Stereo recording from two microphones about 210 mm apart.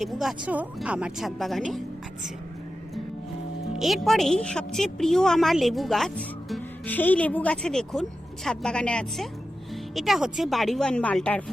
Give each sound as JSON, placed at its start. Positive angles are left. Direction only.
{"t": 0.0, "sound": "a woman's voice", "side_deg": 0}
{"t": 3.8, "sound": "a woman's voice", "side_deg": 0}